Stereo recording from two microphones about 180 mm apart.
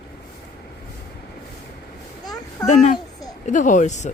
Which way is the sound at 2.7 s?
45° left (ahead or behind).